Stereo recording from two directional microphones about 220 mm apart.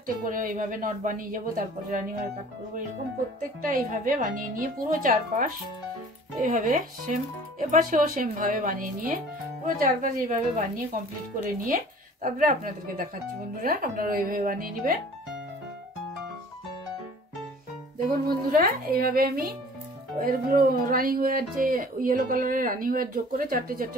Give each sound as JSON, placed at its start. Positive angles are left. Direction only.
{"t": 0.0, "sound": "speech", "side_deg": -40}
{"t": 3.6, "sound": "speech", "side_deg": -35}
{"t": 18.0, "sound": "a woman's voice", "side_deg": -40}